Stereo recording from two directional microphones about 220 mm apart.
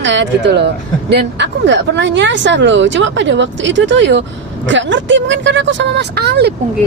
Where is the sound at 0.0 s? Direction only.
55° right (ahead or behind).